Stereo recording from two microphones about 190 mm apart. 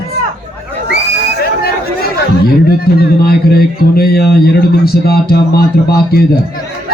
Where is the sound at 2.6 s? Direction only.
55° left (ahead or behind).